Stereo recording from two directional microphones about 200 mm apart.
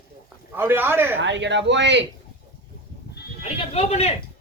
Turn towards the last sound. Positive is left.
turn(degrees=30)  # may be behind; listen again after turning